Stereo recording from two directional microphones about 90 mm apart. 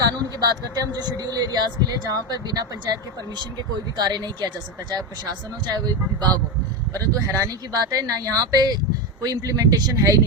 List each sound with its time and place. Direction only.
0.0 s speech: 45° right (ahead or behind)
6.9 s speech: 40° right (ahead or behind)